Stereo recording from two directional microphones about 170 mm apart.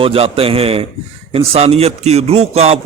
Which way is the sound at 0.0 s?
35° right (ahead or behind).